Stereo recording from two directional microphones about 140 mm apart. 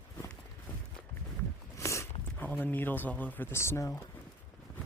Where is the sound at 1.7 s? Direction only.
20° left (ahead or behind).